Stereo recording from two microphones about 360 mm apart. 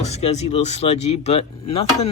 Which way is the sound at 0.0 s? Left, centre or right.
Centre.